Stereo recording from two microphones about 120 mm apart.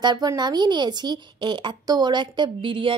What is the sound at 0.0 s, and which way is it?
Speech, 35° right (ahead or behind).